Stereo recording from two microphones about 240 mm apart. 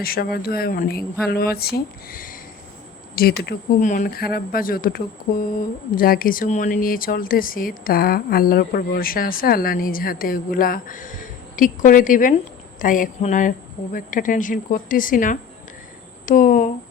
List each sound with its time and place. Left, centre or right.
0.0 s speech: left